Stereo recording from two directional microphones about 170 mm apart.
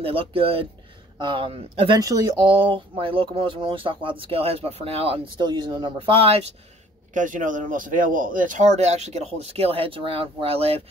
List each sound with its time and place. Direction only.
0.0 s speech: 35° right (ahead or behind)
2.0 s speech: 20° right (ahead or behind)
7.2 s speech: 50° right (ahead or behind); by 10.8 s 35° right (ahead or behind)